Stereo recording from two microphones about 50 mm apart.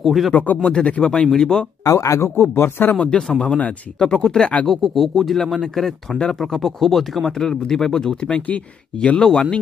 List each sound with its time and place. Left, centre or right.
0.0 s speech: centre
0.3 s speech: left
0.7 s speech: centre
1.9 s speech: left
3.1 s speech: centre
4.6 s speech: centre
8.4 s speech: left
8.9 s speech: centre
9.2 s speech: centre